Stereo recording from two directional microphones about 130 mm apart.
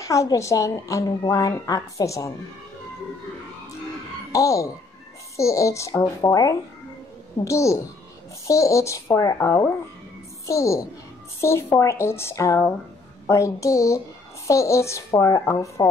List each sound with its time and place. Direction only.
0.0 s a woman's voice: 25° left (ahead or behind)
4.3 s a woman's voice: 25° left (ahead or behind)